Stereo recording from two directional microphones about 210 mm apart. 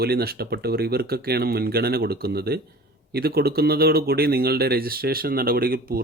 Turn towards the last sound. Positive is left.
turn(degrees=-45)  # may be behind; listen again after turning